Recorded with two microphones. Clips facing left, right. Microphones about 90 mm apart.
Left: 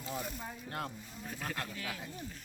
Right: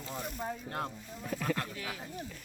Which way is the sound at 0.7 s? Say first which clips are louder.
Right 3 dB; 25° right (ahead or behind).